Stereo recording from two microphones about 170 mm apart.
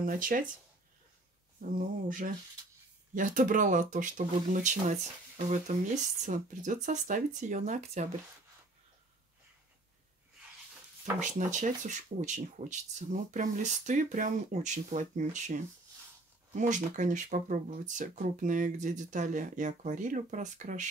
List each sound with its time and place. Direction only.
0.0 s speech: 55° right (ahead or behind)
1.8 s speech: 55° right (ahead or behind)
11.1 s speech: 45° right (ahead or behind)